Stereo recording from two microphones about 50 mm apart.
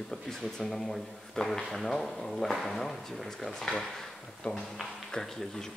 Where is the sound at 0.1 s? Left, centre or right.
Centre.